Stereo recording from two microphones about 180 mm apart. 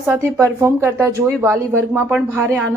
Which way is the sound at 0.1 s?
15° right (ahead or behind).